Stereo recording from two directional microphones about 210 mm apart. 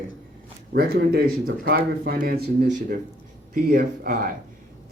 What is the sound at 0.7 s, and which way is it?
Speech, 50° right (ahead or behind).